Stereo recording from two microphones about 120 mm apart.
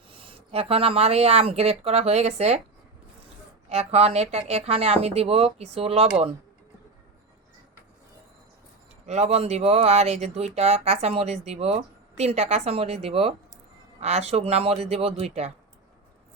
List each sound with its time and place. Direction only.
0.1 s speech: 45° right (ahead or behind); by 2.6 s 65° right (ahead or behind)
3.7 s speech: 60° right (ahead or behind)
9.0 s speech: 65° right (ahead or behind)